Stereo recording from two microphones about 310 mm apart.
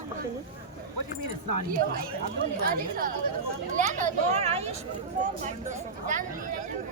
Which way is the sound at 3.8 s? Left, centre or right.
Right.